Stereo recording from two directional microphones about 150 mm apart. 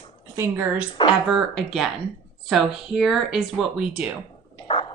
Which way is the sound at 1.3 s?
Centre (ahead or behind).